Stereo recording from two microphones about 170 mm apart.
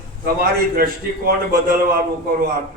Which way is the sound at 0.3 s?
60° right (ahead or behind).